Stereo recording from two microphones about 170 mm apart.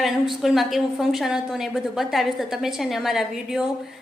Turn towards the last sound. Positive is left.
turn(degrees=0)  # may be behind; listen again after turning